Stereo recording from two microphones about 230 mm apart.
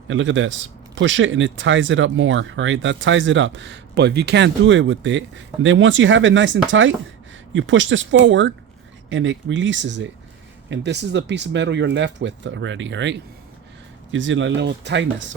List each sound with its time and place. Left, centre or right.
0.1 s speech: right